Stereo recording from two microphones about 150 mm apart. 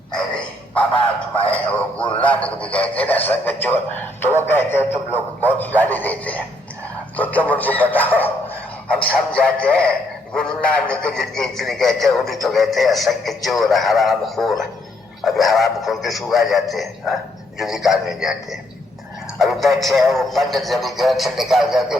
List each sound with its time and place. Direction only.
0.1 s dog: 5° left (ahead or behind)
2.0 s a man's voice: 35° left (ahead or behind)
2.2 s a man's voice: 10° left (ahead or behind)
19.4 s a man's voice: centre (ahead or behind)